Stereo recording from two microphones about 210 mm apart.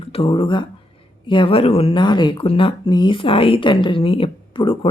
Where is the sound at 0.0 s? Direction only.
25° left (ahead or behind).